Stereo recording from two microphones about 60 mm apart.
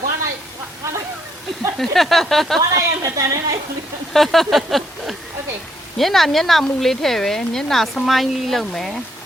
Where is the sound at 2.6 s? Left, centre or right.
Right.